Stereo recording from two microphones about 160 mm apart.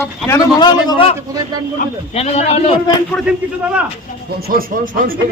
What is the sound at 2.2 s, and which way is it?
Speech, 40° left (ahead or behind).